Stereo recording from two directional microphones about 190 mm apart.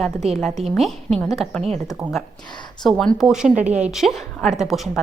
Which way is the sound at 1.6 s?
35° right (ahead or behind).